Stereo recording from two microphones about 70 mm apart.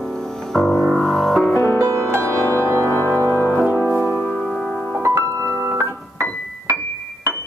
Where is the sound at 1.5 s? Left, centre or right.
Left.